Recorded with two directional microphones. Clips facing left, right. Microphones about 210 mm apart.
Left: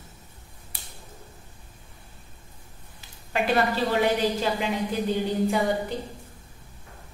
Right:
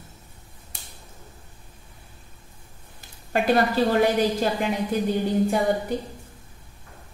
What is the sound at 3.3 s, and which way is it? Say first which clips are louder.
Speech: right 3 dB; 45° right (ahead or behind).